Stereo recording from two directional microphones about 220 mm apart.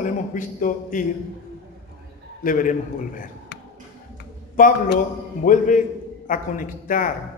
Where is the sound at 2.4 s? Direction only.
35° left (ahead or behind).